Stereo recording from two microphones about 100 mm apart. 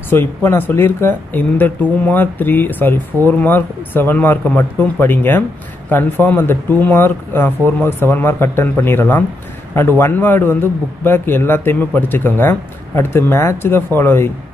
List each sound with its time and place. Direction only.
0.1 s speech: 25° left (ahead or behind)